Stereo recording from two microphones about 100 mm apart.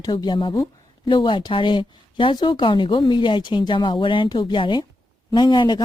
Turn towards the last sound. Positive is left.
turn(degrees=45)  # may be behind; listen again after turning